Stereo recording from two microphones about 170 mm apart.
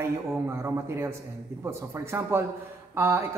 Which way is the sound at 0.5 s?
15° right (ahead or behind).